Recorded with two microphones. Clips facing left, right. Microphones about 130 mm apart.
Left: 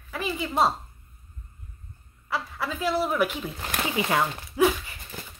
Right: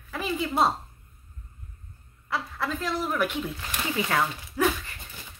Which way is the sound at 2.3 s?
5° left (ahead or behind).